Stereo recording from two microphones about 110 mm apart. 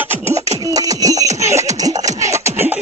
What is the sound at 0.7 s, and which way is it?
Music, 35° right (ahead or behind).